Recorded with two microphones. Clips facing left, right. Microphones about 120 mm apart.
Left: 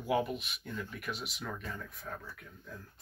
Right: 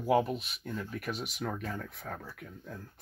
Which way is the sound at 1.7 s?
80° right.